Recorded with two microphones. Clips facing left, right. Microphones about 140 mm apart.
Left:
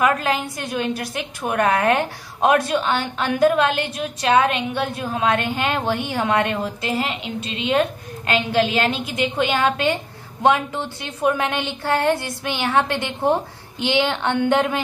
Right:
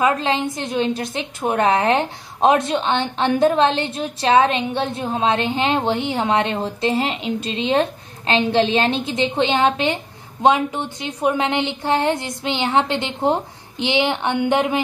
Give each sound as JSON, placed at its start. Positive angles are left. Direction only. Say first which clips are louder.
{"t": 0.0, "sound": "a woman's voice", "louder": "right 1 dB", "side_deg": -25}